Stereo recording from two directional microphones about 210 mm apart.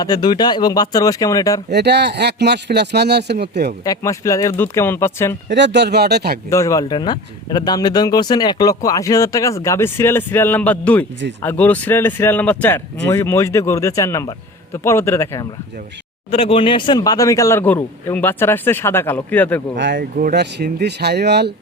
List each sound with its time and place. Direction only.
0.0 s speech: 20° left (ahead or behind)
1.7 s a man's voice: 55° right (ahead or behind)
3.8 s speech: 15° left (ahead or behind)
5.5 s a man's voice: 55° right (ahead or behind)
6.5 s speech: 15° left (ahead or behind)
16.3 s speech: 25° left (ahead or behind); by 19.6 s 10° left (ahead or behind)
19.7 s speech: 55° right (ahead or behind)
20.0 s a man's voice: 45° right (ahead or behind)